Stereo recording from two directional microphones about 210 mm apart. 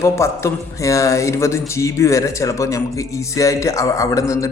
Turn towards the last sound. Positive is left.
turn(degrees=15)  # may be behind; listen again after turning